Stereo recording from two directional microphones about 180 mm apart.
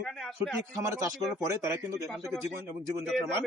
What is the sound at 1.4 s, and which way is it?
Speech, 15° right (ahead or behind).